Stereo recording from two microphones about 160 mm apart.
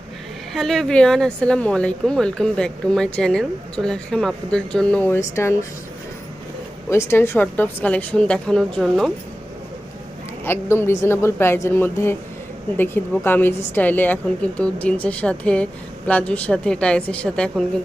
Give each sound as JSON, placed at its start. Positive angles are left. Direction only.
{"t": 0.5, "sound": "speech", "side_deg": 0}
{"t": 6.9, "sound": "a woman's voice", "side_deg": 15}
{"t": 10.4, "sound": "a woman's voice", "side_deg": 15}